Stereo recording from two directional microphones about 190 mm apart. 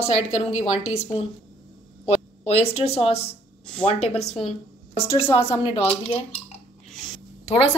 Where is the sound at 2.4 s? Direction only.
30° left (ahead or behind).